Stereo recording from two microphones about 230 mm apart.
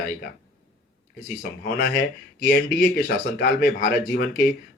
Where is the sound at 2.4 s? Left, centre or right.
Left.